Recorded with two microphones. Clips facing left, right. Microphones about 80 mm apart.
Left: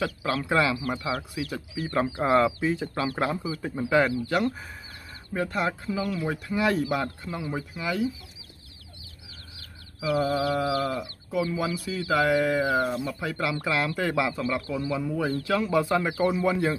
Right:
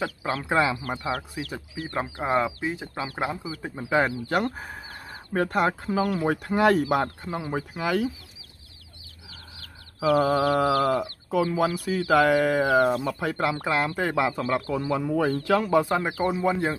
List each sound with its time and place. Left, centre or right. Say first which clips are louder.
0.0 s speech: left 1 dB; right
2.2 s speech: left 2 dB; centre; by 4.4 s right
4.4 s speech: even; right
7.2 s speech: right 2 dB; right
7.5 s speech: right 6 dB; right
9.9 s speech: right 4 dB; right
10.8 s speech: right 5 dB; right
16.0 s speech: left 1 dB; right